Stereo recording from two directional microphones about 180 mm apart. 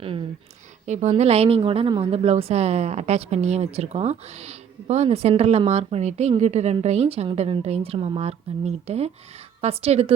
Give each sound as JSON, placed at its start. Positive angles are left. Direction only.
{"t": 0.0, "sound": "speech", "side_deg": -30}
{"t": 0.9, "sound": "a woman's voice", "side_deg": -40}